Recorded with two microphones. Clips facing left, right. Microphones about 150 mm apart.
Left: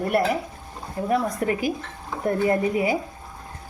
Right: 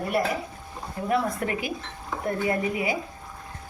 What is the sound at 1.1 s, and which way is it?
A woman's voice, 40° left (ahead or behind).